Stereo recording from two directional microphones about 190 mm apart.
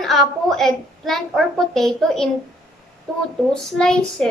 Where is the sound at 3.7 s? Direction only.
5° left (ahead or behind).